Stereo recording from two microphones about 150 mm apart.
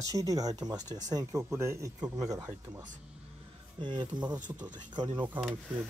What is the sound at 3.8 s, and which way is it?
Speech, 30° right (ahead or behind).